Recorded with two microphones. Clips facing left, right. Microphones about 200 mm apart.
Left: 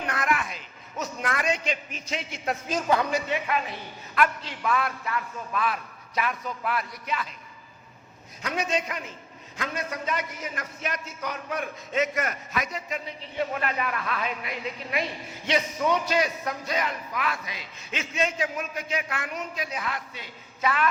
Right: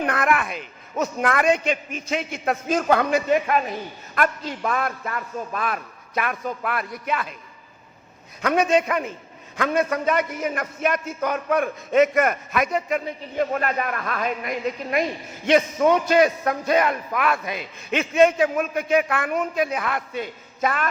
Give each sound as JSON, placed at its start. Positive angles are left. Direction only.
{"t": 0.0, "sound": "a man's voice", "side_deg": -55}
{"t": 8.4, "sound": "a man's voice", "side_deg": -60}